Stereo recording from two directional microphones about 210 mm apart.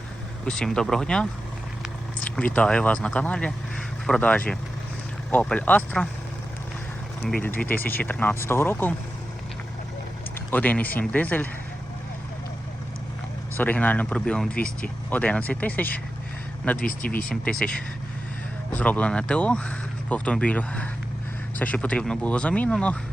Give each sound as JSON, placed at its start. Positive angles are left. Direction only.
{"t": 0.4, "sound": "speech", "side_deg": 5}
{"t": 7.2, "sound": "speech", "side_deg": 5}
{"t": 10.5, "sound": "speech", "side_deg": 10}
{"t": 13.6, "sound": "speech", "side_deg": 10}
{"t": 16.8, "sound": "speech", "side_deg": 40}
{"t": 17.4, "sound": "speech", "side_deg": 5}
{"t": 18.7, "sound": "speech", "side_deg": 5}